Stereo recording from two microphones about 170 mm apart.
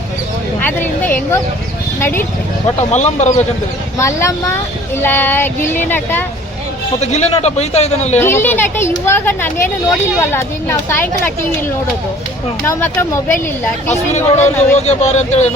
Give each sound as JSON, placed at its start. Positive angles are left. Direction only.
{"t": 0.6, "sound": "a sound", "side_deg": 10}
{"t": 2.0, "sound": "speech", "side_deg": 15}
{"t": 2.9, "sound": "speech", "side_deg": 45}
{"t": 3.9, "sound": "speech", "side_deg": 15}
{"t": 7.0, "sound": "speech", "side_deg": 40}
{"t": 8.2, "sound": "speech", "side_deg": 15}
{"t": 12.6, "sound": "speech", "side_deg": 15}
{"t": 13.9, "sound": "speech", "side_deg": 40}